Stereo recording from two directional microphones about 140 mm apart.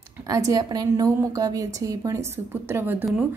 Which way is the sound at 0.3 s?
25° right (ahead or behind).